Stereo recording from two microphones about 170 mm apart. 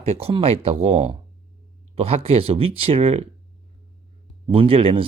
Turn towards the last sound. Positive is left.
turn(degrees=-30)  # may be behind; listen again after turning